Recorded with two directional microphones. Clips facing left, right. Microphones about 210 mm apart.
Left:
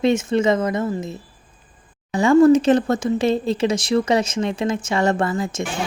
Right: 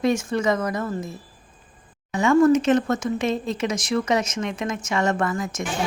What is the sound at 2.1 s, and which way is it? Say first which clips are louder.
Speech: left 4 dB; 35° left (ahead or behind).